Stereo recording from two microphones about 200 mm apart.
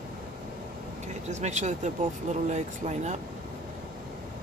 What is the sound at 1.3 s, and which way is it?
Speech, 35° right (ahead or behind).